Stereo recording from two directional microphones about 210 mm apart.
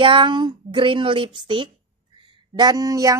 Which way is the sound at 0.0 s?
25° right (ahead or behind).